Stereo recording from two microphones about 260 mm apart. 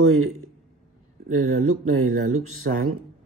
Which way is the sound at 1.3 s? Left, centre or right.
Right.